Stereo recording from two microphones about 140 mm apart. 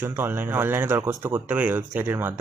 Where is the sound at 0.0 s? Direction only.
15° right (ahead or behind).